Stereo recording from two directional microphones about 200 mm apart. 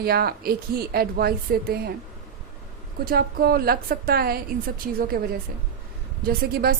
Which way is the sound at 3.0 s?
50° right (ahead or behind).